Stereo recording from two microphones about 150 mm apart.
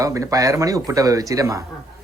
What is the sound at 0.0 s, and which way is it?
Speech, 20° right (ahead or behind).